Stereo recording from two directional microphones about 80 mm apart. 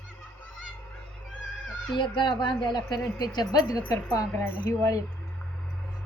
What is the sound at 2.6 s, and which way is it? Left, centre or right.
Speech, left.